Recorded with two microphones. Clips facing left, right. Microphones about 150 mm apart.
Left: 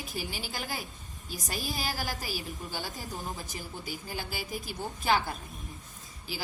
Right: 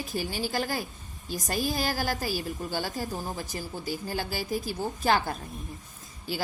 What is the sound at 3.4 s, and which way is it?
Speech, 40° right (ahead or behind).